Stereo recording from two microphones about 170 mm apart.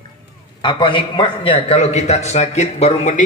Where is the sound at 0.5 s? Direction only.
30° left (ahead or behind).